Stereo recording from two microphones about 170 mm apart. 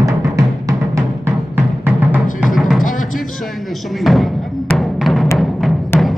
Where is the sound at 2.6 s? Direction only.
Centre (ahead or behind).